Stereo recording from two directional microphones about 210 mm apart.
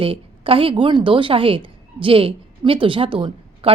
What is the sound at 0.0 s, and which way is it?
A woman's voice, 25° right (ahead or behind).